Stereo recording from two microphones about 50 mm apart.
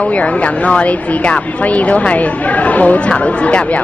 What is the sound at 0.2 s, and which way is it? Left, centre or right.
A woman's voice, left.